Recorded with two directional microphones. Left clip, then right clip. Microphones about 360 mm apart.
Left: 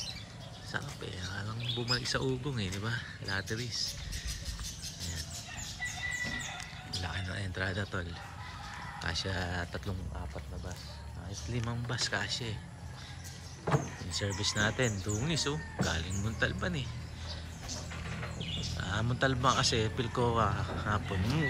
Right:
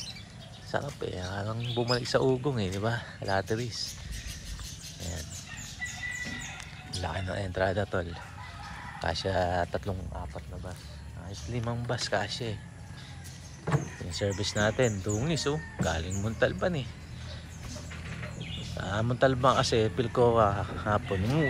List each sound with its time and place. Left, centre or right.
1.0 s speech: centre
7.0 s speech: centre
11.5 s speech: centre
13.7 s speech: left
14.1 s speech: centre
18.8 s speech: centre